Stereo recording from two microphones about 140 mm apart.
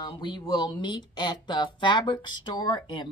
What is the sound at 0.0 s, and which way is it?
Speech, 35° left (ahead or behind).